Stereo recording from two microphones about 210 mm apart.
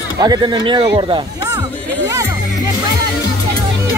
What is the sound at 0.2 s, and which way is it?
Speech, 20° right (ahead or behind).